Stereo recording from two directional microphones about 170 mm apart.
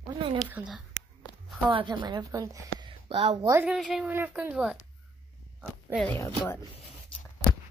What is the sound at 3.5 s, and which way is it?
Speech, 15° right (ahead or behind).